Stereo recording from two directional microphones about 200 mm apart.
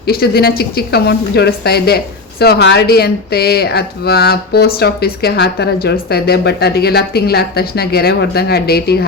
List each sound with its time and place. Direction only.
0.0 s speech: 50° left (ahead or behind)